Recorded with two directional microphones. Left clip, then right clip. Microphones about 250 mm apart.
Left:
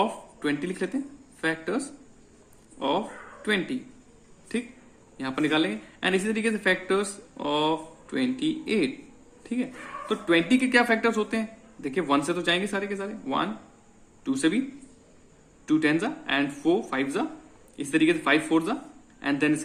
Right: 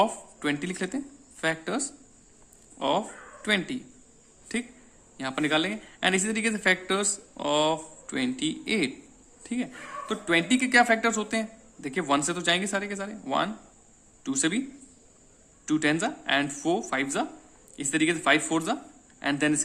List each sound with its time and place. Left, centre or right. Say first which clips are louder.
0.0 s speech: right 2 dB; right
5.1 s speech: left 1 dB; right
9.4 s a sound: left 2 dB; right
10.1 s speech: left 2 dB; right
15.6 s speech: left 2 dB; right